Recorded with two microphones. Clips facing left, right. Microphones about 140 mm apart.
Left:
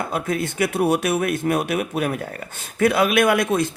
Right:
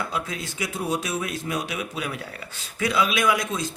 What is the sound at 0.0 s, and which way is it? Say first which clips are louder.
A man's voice: left 6 dB; 55° left (ahead or behind).